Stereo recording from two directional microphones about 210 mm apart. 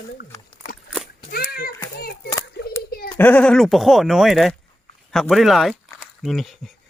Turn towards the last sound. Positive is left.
turn(degrees=0)  # may be behind; listen again after turning